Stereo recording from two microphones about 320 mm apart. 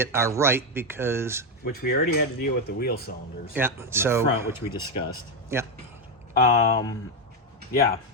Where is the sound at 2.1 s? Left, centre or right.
Left.